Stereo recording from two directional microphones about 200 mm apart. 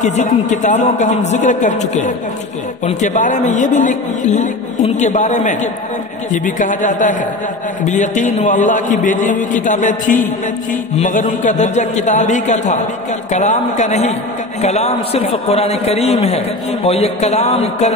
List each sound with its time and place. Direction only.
0.0 s a man's voice: 35° left (ahead or behind)